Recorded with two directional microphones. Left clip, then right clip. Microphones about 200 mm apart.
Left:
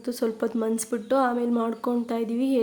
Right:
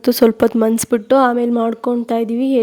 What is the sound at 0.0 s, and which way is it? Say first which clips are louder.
Speech: right 14 dB; 45° right (ahead or behind).